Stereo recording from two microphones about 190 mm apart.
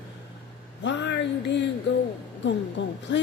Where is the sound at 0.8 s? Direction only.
65° left (ahead or behind).